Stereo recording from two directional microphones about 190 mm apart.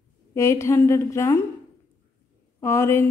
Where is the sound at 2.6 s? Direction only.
15° left (ahead or behind).